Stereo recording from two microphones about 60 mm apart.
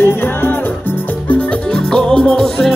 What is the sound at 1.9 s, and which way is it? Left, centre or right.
Music, centre.